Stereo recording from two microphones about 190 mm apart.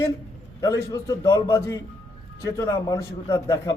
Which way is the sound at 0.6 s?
15° left (ahead or behind).